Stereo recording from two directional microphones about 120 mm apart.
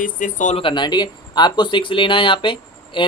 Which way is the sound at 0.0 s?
90° left.